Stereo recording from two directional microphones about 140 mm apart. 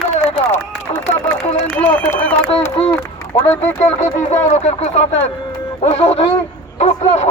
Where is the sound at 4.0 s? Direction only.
55° left (ahead or behind).